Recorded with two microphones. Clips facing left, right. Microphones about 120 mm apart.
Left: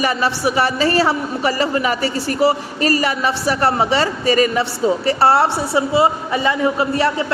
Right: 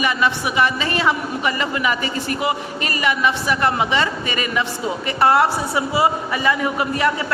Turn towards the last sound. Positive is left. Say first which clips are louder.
# left 3 dB
turn(degrees=30)  # may be behind; listen again after turning